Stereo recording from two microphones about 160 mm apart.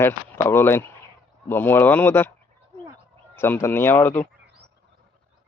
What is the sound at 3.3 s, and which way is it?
Speech, 15° left (ahead or behind).